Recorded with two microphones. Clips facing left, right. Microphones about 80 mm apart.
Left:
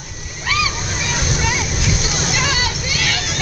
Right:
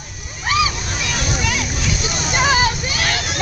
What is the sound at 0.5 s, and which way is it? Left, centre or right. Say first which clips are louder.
Slosh: right 2 dB; right.